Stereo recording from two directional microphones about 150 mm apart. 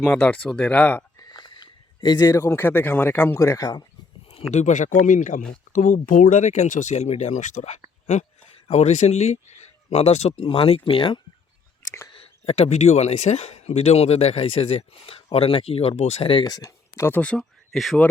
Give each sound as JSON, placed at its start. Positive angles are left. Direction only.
{"t": 0.0, "sound": "speech", "side_deg": 5}
{"t": 1.3, "sound": "speech", "side_deg": 30}
{"t": 4.5, "sound": "speech", "side_deg": 50}
{"t": 16.4, "sound": "speech", "side_deg": 25}